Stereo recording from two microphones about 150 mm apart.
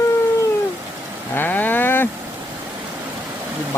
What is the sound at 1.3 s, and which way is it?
Cattle, 10° left (ahead or behind).